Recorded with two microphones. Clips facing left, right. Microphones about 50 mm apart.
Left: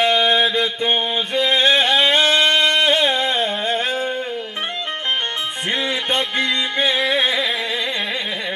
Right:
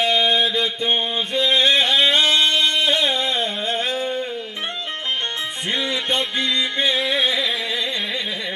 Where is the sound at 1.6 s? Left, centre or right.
Left.